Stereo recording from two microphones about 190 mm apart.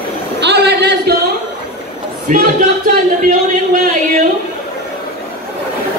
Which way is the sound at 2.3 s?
45° right (ahead or behind).